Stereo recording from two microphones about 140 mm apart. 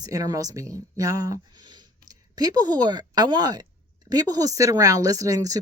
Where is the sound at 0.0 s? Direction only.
25° right (ahead or behind).